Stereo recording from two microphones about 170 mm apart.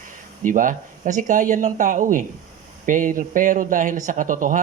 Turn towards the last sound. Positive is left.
turn(degrees=-50)  # may be behind; listen again after turning